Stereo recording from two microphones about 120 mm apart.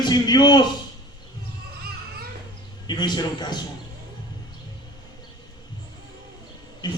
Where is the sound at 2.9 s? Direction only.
35° left (ahead or behind).